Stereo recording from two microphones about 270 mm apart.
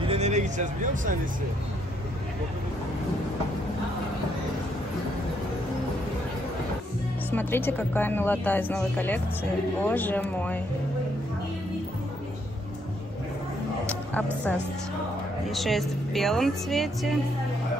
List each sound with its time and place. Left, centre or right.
0.0 s music: right
7.2 s speech: centre
13.8 s a sound: centre
15.5 s speech: centre